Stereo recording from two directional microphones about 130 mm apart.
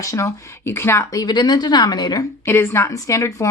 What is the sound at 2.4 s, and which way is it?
A woman's voice, 20° left (ahead or behind).